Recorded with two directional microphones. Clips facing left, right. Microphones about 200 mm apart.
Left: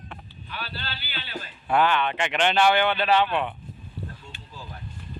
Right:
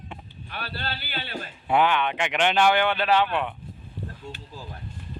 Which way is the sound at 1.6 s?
15° right (ahead or behind).